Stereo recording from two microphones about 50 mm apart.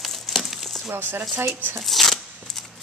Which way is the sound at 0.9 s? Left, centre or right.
Right.